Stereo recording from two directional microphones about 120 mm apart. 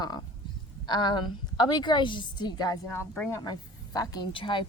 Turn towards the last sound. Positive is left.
turn(degrees=40)  # may be behind; listen again after turning